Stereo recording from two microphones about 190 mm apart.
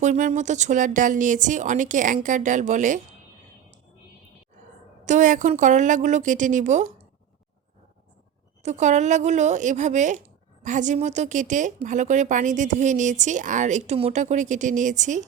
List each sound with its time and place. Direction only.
0.0 s a woman's voice: 40° right (ahead or behind)
5.0 s a woman's voice: 40° right (ahead or behind)
8.6 s a woman's voice: 40° right (ahead or behind)